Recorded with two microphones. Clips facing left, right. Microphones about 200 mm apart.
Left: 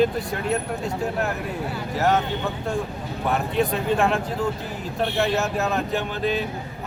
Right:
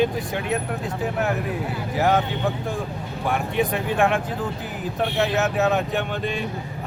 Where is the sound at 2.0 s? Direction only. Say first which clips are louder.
Right 1 dB; centre (ahead or behind).